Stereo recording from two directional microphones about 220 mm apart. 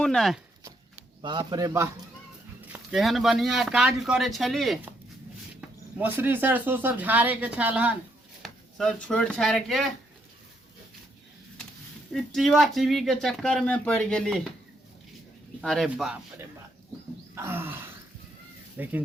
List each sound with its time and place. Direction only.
0.0 s speech: centre (ahead or behind)
1.2 s speech: 20° right (ahead or behind)
2.7 s speech: centre (ahead or behind)
12.1 s speech: centre (ahead or behind)
15.6 s speech: centre (ahead or behind)